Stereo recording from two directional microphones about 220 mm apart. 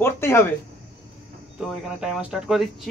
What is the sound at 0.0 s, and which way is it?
Speech, 10° left (ahead or behind).